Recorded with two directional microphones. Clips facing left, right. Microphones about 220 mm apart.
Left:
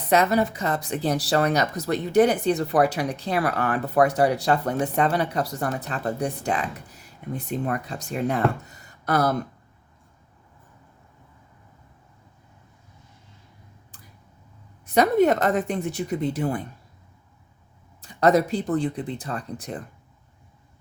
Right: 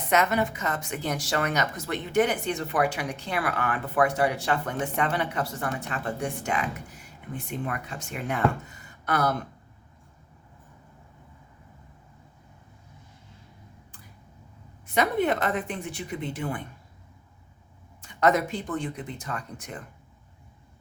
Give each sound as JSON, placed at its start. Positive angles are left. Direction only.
{"t": 0.1, "sound": "speech", "side_deg": 35}
{"t": 14.9, "sound": "speech", "side_deg": 40}
{"t": 18.0, "sound": "speech", "side_deg": 35}